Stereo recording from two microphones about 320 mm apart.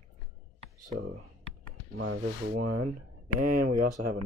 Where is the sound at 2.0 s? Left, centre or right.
Right.